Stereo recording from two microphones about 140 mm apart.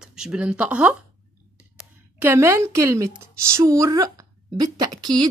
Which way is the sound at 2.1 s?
15° right (ahead or behind).